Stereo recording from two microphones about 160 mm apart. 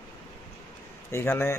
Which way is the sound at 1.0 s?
15° left (ahead or behind).